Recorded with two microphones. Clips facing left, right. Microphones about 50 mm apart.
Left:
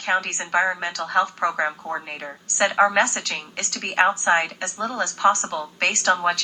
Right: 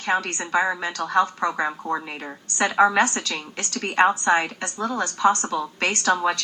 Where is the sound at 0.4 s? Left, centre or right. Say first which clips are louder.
Even; left.